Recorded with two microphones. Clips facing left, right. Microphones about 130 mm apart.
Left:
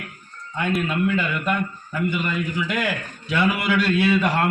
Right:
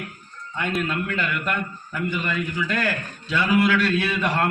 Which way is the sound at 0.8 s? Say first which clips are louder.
Left 4 dB; 15° left (ahead or behind).